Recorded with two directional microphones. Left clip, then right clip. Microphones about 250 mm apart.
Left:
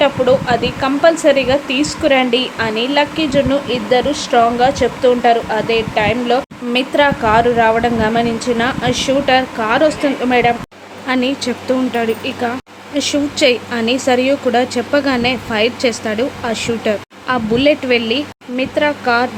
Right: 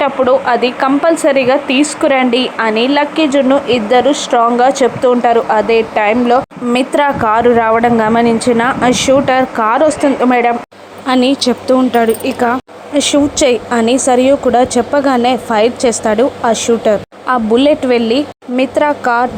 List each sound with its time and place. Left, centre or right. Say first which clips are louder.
0.0 s a woman's voice: right 2 dB; centre